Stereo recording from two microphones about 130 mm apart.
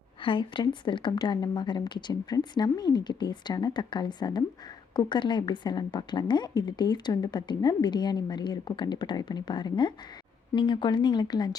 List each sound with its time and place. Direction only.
0.2 s a woman's voice: 40° left (ahead or behind)